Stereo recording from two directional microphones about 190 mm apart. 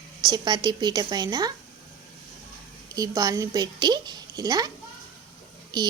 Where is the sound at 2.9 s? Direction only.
20° right (ahead or behind).